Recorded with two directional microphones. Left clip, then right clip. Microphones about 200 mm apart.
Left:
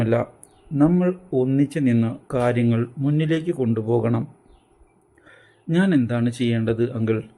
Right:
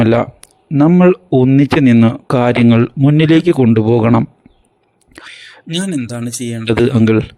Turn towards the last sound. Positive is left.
turn(degrees=-55)  # may be behind; listen again after turning